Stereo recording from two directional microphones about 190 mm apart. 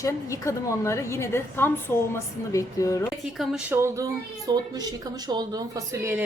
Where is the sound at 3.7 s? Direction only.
15° right (ahead or behind).